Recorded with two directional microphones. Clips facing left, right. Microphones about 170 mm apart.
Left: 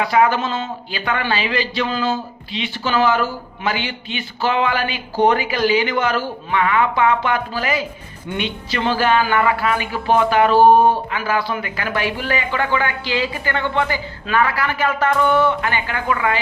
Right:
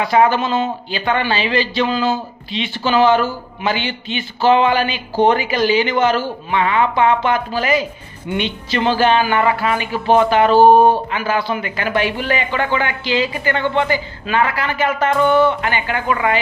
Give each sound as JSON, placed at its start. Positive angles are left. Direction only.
{"t": 0.1, "sound": "a man's voice", "side_deg": -30}
{"t": 0.4, "sound": "speech", "side_deg": -10}
{"t": 0.9, "sound": "a man's voice", "side_deg": -25}